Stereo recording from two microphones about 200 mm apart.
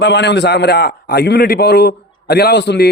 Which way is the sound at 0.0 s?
60° left (ahead or behind).